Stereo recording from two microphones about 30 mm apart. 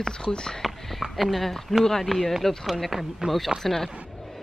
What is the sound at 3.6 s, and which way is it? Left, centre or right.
Speech, centre.